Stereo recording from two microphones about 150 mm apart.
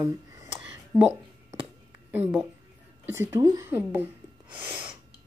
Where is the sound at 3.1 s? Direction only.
20° right (ahead or behind).